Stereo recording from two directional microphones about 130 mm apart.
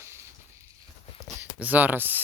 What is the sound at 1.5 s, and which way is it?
Speech, 10° right (ahead or behind).